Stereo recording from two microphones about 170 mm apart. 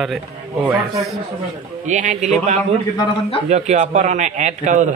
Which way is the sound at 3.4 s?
40° right (ahead or behind).